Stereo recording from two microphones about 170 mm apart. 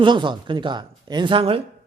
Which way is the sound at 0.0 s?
25° right (ahead or behind).